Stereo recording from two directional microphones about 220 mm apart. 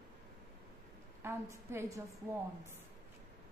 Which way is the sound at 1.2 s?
10° right (ahead or behind).